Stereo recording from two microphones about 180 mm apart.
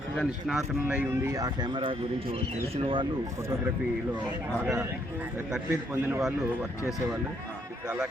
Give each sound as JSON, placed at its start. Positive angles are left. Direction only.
{"t": 0.2, "sound": "a man's voice", "side_deg": 0}
{"t": 1.1, "sound": "speech", "side_deg": -15}
{"t": 4.6, "sound": "a man's voice", "side_deg": -10}
{"t": 7.9, "sound": "a man's voice", "side_deg": -5}